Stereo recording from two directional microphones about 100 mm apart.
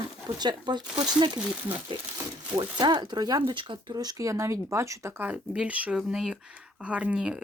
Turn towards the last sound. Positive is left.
turn(degrees=-10)  # may be behind; listen again after turning